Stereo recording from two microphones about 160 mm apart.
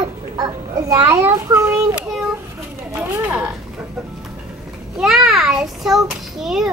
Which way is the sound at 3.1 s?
15° right (ahead or behind).